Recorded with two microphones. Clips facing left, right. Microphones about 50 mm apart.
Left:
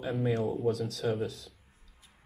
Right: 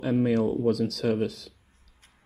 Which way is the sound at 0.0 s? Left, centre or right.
Right.